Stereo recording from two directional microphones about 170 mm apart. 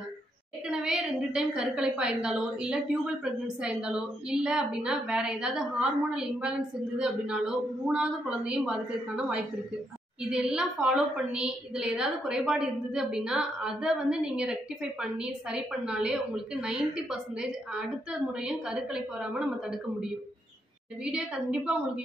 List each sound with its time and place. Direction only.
0.7 s a woman's voice: 5° right (ahead or behind)